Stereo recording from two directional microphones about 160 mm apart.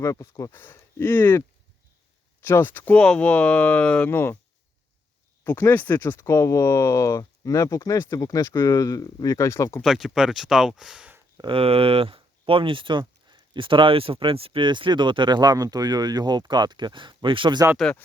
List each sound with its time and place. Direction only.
0.0 s speech: 20° left (ahead or behind)
5.4 s speech: 15° left (ahead or behind)
9.8 s speech: centre (ahead or behind)
11.3 s speech: 30° right (ahead or behind)
17.7 s speech: 5° left (ahead or behind)